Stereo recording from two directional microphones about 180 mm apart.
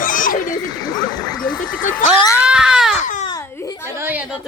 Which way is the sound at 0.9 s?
20° left (ahead or behind).